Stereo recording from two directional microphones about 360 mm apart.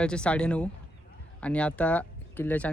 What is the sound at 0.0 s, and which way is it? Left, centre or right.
Speech, centre.